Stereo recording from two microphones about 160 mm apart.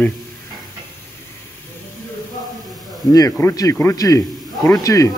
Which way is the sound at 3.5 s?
20° left (ahead or behind).